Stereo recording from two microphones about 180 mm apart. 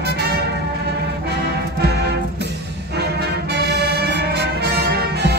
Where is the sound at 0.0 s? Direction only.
65° right (ahead or behind).